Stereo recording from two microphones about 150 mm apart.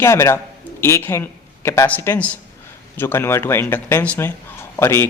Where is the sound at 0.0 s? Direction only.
20° left (ahead or behind).